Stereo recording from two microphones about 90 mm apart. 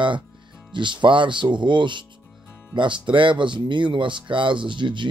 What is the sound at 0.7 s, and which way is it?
Speech, 60° right (ahead or behind).